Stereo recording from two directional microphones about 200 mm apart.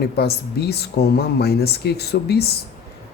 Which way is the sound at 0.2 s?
55° left (ahead or behind).